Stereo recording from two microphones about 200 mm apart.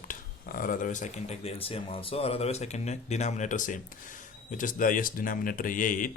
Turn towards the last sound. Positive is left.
turn(degrees=40)  # may be behind; listen again after turning